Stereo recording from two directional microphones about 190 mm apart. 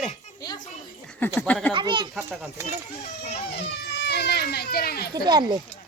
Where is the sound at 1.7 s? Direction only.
25° right (ahead or behind).